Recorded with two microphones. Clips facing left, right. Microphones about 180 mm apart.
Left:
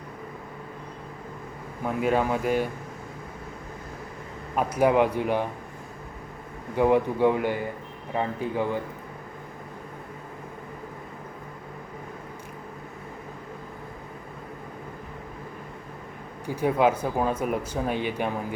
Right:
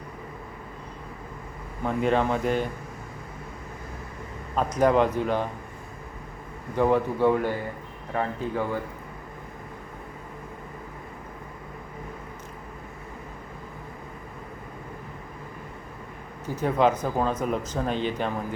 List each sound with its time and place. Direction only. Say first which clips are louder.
1.8 s speech: right 1 dB; 5° left (ahead or behind)
4.5 s speech: even; 10° left (ahead or behind)
6.7 s speech: left 1 dB; 15° left (ahead or behind)
16.5 s speech: even; 10° left (ahead or behind)